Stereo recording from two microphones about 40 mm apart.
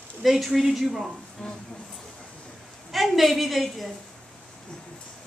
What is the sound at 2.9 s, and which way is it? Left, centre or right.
Speech, centre.